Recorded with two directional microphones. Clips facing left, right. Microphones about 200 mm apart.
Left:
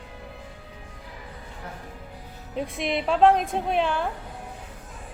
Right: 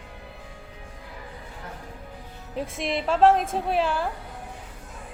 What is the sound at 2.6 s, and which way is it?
A woman's voice, centre (ahead or behind).